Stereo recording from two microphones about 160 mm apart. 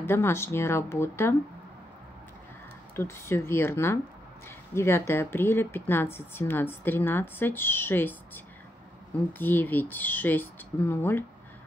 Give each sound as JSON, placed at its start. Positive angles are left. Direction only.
{"t": 0.0, "sound": "a woman's voice", "side_deg": 15}
{"t": 3.0, "sound": "a woman's voice", "side_deg": 15}
{"t": 9.4, "sound": "a woman's voice", "side_deg": 10}